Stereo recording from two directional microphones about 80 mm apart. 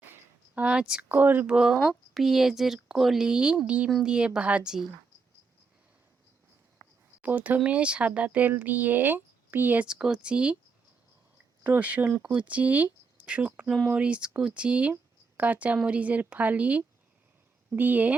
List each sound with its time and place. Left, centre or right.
0.5 s speech: centre
1.0 s speech: right
1.5 s speech: centre
6.8 s a sound: right
7.2 s speech: right
9.8 s speech: centre
11.6 s speech: right